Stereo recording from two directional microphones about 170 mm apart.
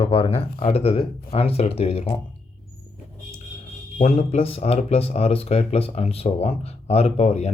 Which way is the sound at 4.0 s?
40° left (ahead or behind).